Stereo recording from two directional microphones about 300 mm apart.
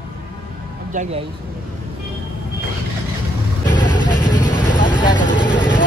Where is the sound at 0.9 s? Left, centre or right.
Right.